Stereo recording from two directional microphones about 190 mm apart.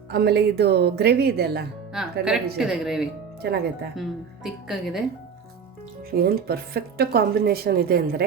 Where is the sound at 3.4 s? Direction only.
60° right (ahead or behind).